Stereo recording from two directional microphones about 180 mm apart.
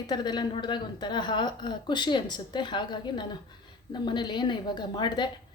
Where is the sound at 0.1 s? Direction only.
25° left (ahead or behind).